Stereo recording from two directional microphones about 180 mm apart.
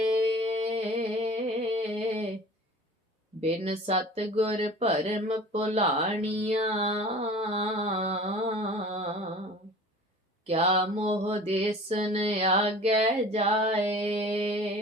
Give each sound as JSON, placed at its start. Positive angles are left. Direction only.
{"t": 0.1, "sound": "music", "side_deg": -30}
{"t": 3.4, "sound": "speech", "side_deg": -35}
{"t": 10.4, "sound": "mantra", "side_deg": -35}